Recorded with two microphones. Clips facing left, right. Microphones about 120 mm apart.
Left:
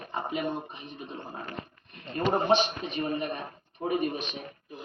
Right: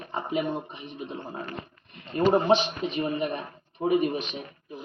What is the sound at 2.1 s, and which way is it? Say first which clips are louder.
A woman's voice: right 3 dB; 20° right (ahead or behind).